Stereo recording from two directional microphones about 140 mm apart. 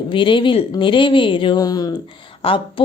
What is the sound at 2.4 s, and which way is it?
Speech, 40° left (ahead or behind).